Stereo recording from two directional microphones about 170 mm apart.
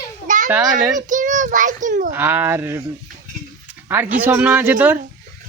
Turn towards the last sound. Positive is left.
turn(degrees=-10)  # may be behind; listen again after turning